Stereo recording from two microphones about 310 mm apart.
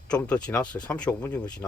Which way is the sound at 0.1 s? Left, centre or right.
Centre.